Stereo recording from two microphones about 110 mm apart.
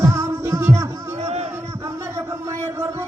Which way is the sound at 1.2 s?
75° right (ahead or behind).